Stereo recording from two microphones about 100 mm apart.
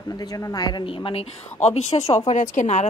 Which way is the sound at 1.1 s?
90° left.